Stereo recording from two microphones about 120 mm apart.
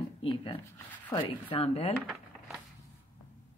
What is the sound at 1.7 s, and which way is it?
Speech, 60° left (ahead or behind).